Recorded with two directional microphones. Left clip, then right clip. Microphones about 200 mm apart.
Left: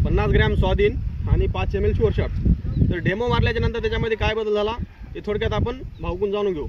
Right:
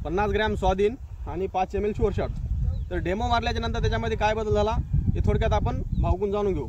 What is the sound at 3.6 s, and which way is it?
Speech, 35° right (ahead or behind).